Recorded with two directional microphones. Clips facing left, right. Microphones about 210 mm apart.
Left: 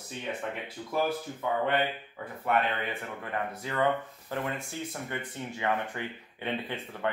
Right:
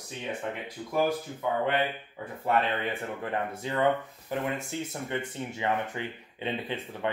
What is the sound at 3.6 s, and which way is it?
Speech, 20° right (ahead or behind).